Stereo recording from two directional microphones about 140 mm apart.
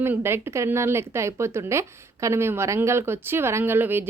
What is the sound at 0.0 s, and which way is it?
Speech, 15° right (ahead or behind).